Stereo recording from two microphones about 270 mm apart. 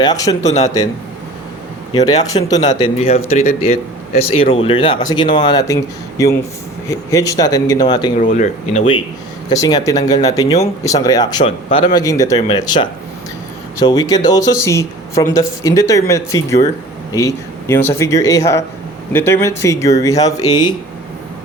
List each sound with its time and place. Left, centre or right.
0.0 s speech: centre
1.9 s speech: centre
8.2 s speech: left